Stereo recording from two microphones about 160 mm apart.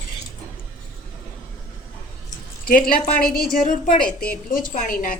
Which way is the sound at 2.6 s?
60° left (ahead or behind).